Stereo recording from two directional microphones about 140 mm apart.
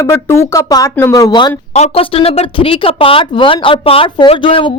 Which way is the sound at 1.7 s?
45° left (ahead or behind).